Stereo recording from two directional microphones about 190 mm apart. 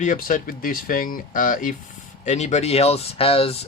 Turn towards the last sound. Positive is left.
turn(degrees=30)  # may be behind; listen again after turning